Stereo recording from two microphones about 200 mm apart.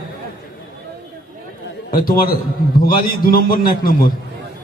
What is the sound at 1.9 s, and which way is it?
A man's voice, 45° left (ahead or behind).